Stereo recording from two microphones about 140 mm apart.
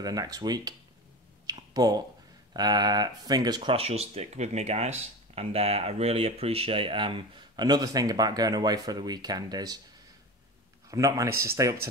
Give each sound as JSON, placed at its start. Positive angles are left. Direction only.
{"t": 0.0, "sound": "speech", "side_deg": -25}
{"t": 3.7, "sound": "speech", "side_deg": -45}
{"t": 10.9, "sound": "speech", "side_deg": -25}